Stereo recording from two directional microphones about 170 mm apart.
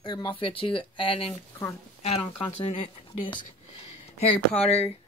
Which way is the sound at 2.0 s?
35° left (ahead or behind).